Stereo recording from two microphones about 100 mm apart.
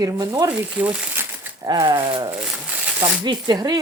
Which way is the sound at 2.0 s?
50° right (ahead or behind).